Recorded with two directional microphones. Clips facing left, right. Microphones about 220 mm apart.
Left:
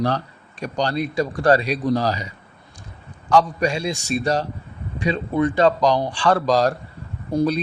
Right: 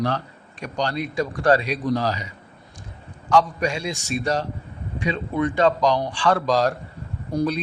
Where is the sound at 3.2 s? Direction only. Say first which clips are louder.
Left 2 dB; 35° left (ahead or behind).